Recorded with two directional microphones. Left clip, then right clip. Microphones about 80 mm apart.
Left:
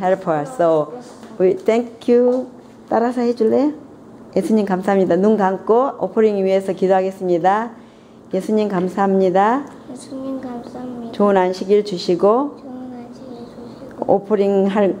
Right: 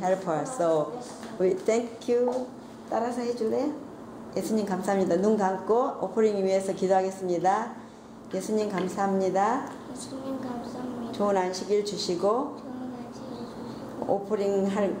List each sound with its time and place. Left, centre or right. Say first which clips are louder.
0.0 s a woman's voice: left 9 dB; left
14.3 s a woman's voice: left 10 dB; left